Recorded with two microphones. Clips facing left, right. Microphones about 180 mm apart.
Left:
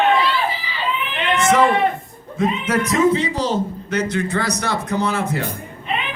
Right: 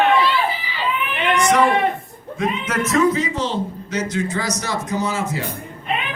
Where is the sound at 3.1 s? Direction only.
30° left (ahead or behind).